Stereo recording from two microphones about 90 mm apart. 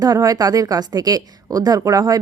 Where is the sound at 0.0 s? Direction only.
45° right (ahead or behind).